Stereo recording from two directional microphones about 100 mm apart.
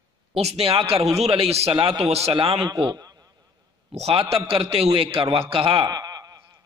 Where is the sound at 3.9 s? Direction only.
90° right.